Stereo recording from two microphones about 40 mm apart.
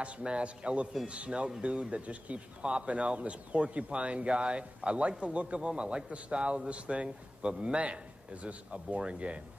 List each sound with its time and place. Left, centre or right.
0.0 s a man's voice: right